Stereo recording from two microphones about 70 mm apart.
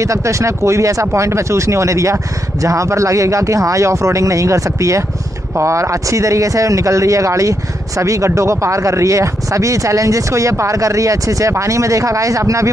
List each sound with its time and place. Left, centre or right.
0.0 s speech: right